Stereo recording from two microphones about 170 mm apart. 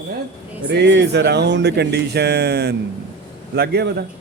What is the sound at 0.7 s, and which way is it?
A man's voice, 85° right.